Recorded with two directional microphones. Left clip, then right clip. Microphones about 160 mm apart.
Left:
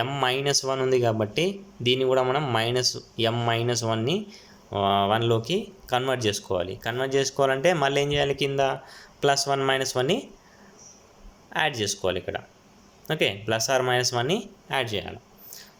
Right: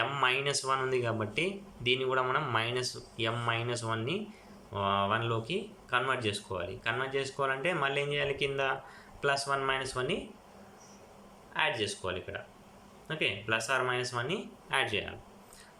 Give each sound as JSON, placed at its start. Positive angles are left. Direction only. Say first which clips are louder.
{"t": 0.0, "sound": "speech", "louder": "left 4 dB", "side_deg": 35}
{"t": 9.2, "sound": "speech", "louder": "left 7 dB", "side_deg": 40}
{"t": 11.5, "sound": "speech", "louder": "left 5 dB", "side_deg": 45}